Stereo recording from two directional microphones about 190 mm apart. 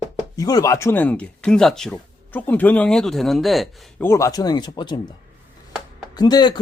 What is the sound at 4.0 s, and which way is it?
A man's voice, 15° left (ahead or behind).